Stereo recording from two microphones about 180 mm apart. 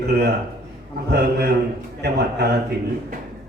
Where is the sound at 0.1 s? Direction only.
60° right (ahead or behind).